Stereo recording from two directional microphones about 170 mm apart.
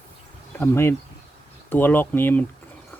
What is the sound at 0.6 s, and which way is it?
Speech, 15° left (ahead or behind).